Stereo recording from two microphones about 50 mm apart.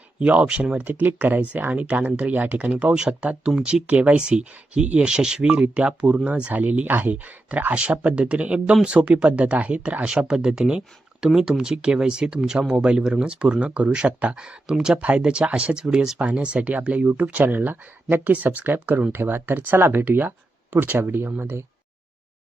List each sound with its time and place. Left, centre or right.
0.2 s speech: right
0.8 s speech: right
4.2 s speech: centre
16.1 s speech: right
17.4 s speech: right
21.0 s speech: right